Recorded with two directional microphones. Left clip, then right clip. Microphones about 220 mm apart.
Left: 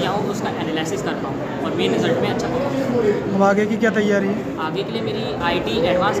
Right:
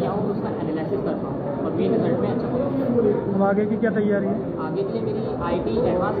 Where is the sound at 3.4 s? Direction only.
20° left (ahead or behind).